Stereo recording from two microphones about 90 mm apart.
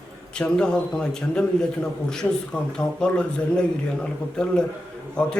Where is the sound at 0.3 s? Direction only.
10° left (ahead or behind).